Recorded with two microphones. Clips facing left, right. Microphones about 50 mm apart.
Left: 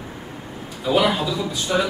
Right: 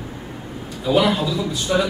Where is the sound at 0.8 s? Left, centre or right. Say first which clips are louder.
Right 1 dB; centre.